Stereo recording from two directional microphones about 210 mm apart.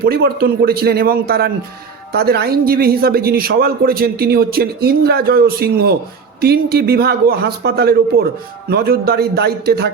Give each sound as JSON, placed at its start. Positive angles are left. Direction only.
{"t": 0.0, "sound": "speech", "side_deg": -45}